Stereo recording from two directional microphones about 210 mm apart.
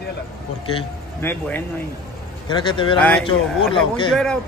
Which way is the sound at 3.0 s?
5° left (ahead or behind).